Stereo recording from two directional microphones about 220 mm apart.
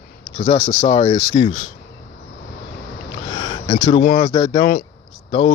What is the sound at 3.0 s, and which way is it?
Sniff, 20° left (ahead or behind).